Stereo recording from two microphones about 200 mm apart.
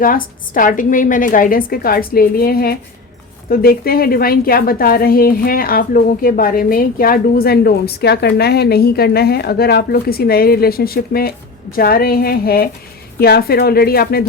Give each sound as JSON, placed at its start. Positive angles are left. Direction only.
{"t": 0.0, "sound": "a woman's voice", "side_deg": 45}